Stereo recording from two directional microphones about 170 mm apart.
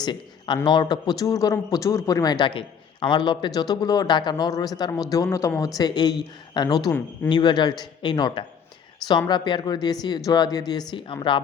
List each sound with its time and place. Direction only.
0.0 s a man's voice: 25° left (ahead or behind)